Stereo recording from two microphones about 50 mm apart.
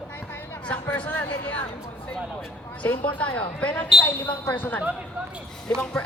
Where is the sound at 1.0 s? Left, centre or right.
Left.